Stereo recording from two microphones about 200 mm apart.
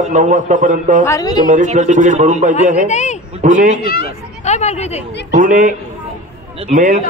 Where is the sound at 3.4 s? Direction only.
40° right (ahead or behind).